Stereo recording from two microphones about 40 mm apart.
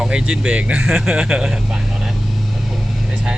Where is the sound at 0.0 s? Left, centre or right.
Centre.